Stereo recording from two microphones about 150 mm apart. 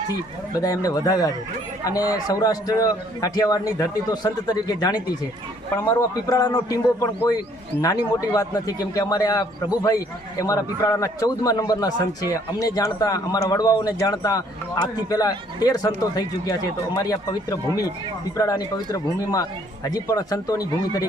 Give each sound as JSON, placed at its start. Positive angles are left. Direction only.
{"t": 0.6, "sound": "a man's voice", "side_deg": 25}